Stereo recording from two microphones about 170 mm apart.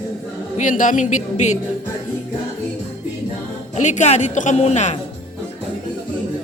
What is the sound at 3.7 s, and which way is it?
A woman's voice, 45° left (ahead or behind).